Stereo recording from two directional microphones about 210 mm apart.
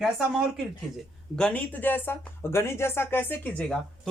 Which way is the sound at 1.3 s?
5° left (ahead or behind).